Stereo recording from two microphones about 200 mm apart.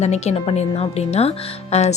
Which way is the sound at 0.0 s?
35° left (ahead or behind).